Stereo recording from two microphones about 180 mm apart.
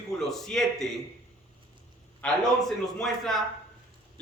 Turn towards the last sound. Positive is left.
turn(degrees=0)  # may be behind; listen again after turning